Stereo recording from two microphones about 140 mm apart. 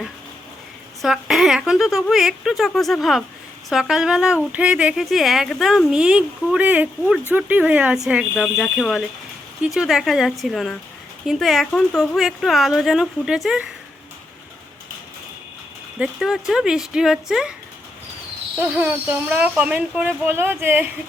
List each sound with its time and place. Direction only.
1.0 s speech: centre (ahead or behind)
16.0 s speech: 5° right (ahead or behind)
18.6 s speech: 10° right (ahead or behind)